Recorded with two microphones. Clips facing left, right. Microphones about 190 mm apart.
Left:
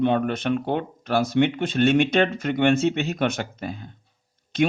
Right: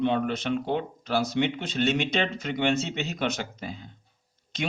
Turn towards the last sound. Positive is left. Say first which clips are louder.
# left 10 dB
turn(degrees=55)  # may be behind; listen again after turning